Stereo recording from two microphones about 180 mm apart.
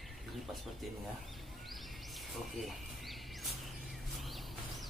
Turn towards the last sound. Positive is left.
turn(degrees=0)  # may be behind; listen again after turning